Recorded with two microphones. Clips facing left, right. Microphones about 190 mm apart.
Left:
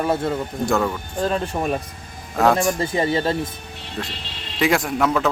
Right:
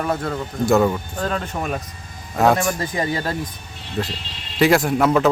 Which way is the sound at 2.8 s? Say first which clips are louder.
Left 3 dB; 25° left (ahead or behind).